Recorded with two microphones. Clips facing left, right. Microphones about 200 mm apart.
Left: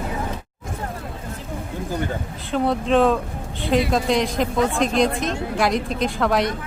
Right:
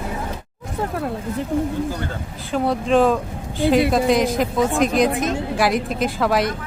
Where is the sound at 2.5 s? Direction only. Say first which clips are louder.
Right 1 dB; centre (ahead or behind).